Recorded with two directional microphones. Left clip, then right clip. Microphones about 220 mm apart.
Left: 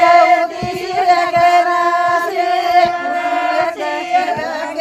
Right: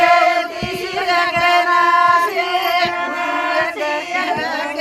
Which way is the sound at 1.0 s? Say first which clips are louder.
Left 4 dB; 55° left (ahead or behind).